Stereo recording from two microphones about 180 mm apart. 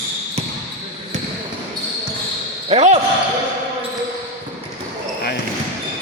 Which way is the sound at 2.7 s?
35° right (ahead or behind).